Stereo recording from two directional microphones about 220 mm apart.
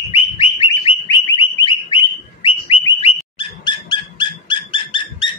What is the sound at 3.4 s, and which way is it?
Dog, 20° left (ahead or behind).